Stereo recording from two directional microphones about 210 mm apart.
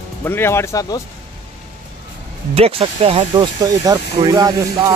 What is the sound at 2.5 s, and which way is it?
Speech, 25° right (ahead or behind).